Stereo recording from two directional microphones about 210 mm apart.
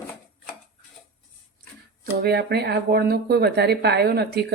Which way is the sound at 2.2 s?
50° right (ahead or behind).